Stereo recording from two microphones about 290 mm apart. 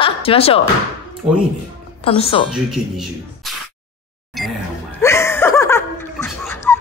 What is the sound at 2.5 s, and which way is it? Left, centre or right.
Speech, centre.